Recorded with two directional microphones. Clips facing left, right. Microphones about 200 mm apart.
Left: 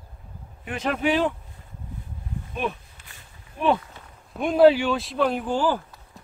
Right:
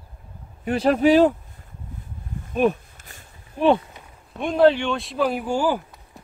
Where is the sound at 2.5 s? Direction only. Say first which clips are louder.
Right 10 dB; 45° right (ahead or behind).